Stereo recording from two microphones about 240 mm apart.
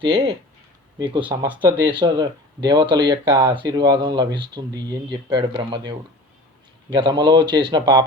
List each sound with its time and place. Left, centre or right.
0.9 s speech: centre